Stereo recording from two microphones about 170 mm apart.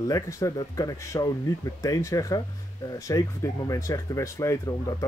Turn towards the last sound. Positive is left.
turn(degrees=20)  # may be behind; listen again after turning